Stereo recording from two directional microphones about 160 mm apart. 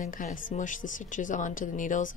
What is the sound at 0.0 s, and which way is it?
A woman's voice, 55° left (ahead or behind).